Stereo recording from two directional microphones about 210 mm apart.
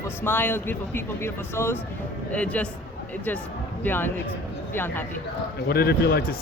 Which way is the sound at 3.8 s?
10° left (ahead or behind).